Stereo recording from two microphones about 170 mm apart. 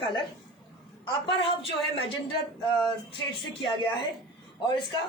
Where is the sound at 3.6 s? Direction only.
30° left (ahead or behind).